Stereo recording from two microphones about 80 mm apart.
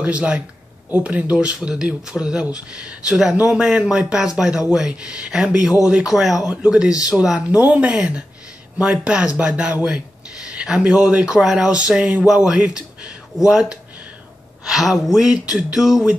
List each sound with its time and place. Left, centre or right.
0.0 s speech: centre